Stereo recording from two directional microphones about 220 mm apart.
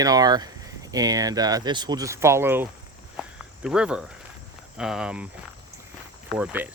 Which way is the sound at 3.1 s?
5° right (ahead or behind).